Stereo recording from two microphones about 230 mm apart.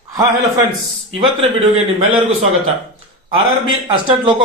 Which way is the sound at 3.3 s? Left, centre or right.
Right.